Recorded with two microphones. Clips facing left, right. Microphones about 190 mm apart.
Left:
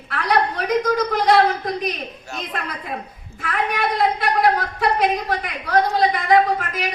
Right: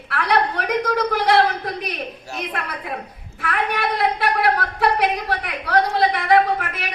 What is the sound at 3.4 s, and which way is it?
A woman's voice, 60° right (ahead or behind).